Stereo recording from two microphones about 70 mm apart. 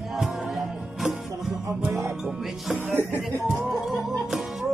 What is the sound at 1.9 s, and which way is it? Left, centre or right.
Music, right.